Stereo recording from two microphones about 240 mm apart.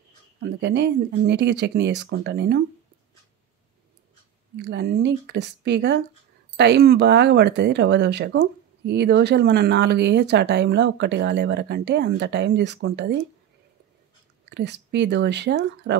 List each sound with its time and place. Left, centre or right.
0.4 s speech: right
4.6 s speech: right
14.5 s speech: right